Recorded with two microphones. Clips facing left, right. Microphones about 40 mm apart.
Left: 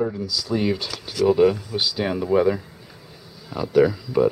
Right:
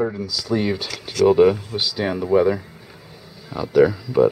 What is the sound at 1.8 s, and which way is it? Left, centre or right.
Speech, centre.